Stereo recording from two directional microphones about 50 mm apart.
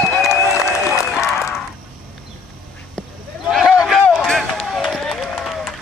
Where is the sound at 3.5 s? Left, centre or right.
Centre.